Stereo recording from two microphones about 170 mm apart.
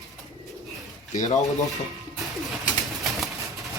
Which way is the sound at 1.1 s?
45° left (ahead or behind).